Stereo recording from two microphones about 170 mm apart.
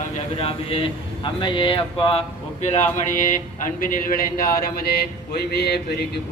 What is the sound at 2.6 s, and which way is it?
A man's voice, 45° left (ahead or behind).